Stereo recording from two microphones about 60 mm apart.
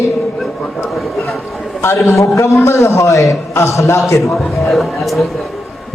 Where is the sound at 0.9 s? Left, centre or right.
Centre.